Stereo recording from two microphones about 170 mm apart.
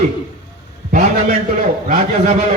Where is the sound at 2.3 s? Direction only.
45° right (ahead or behind).